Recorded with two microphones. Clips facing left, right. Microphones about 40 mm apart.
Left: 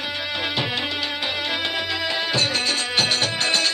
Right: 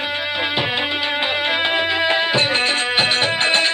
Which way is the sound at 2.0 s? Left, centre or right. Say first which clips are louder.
Right 6 dB; right.